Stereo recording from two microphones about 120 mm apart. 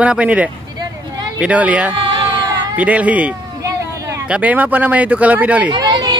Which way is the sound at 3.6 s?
25° right (ahead or behind).